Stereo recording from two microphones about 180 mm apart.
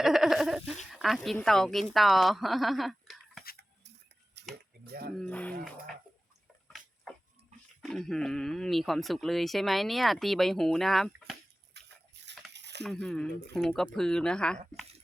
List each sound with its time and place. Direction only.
0.0 s a sound: centre (ahead or behind)
0.9 s speech: centre (ahead or behind)
4.4 s a sound: 70° right (ahead or behind)
4.9 s speech: 60° right (ahead or behind)
5.1 s speech: 5° left (ahead or behind)
6.7 s dog: centre (ahead or behind)
7.8 s speech: 5° left (ahead or behind)
11.7 s dog: 70° right (ahead or behind)
12.5 s a sound: 75° right (ahead or behind)
12.8 s speech: centre (ahead or behind)